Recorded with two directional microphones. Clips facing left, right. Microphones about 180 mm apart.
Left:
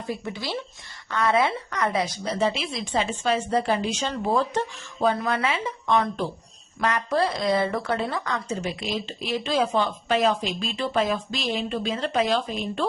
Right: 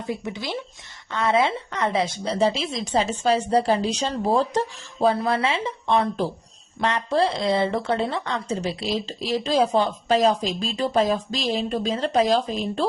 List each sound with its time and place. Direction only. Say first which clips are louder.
0.0 s speech: right 2 dB; 20° right (ahead or behind); by 12.8 s 35° right (ahead or behind)